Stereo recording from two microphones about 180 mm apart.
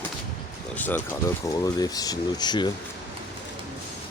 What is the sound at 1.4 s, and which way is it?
Speech, 20° left (ahead or behind).